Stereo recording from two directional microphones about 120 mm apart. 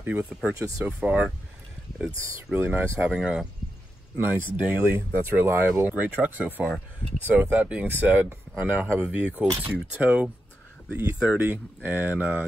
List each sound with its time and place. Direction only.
0.0 s speech: 15° right (ahead or behind)
2.5 s speech: 20° right (ahead or behind)
3.0 s speech: 10° right (ahead or behind)
4.2 s speech: 15° right (ahead or behind)